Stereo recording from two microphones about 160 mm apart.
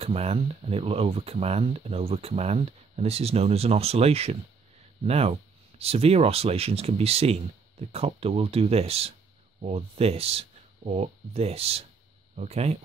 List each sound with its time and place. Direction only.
0.0 s speech: 40° right (ahead or behind)